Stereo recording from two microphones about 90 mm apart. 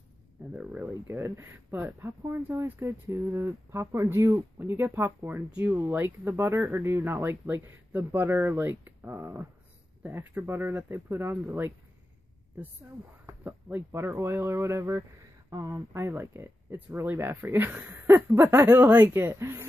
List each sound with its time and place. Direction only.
0.5 s speech: 20° right (ahead or behind)
1.0 s speech: 35° right (ahead or behind)
13.4 s speech: 20° right (ahead or behind)
15.5 s speech: 40° right (ahead or behind)
15.9 s speech: 25° right (ahead or behind)